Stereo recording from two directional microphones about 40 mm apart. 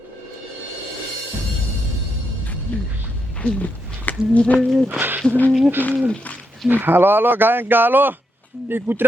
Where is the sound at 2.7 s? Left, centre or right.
Left.